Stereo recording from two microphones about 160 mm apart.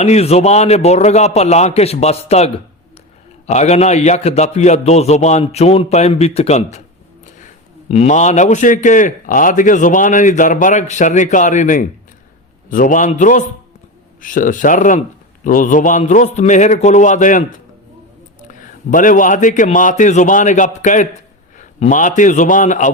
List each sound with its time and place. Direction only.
0.0 s a man's voice: 40° left (ahead or behind)
18.4 s a man's voice: 55° left (ahead or behind)